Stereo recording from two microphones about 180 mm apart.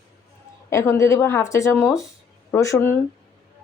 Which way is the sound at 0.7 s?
15° left (ahead or behind).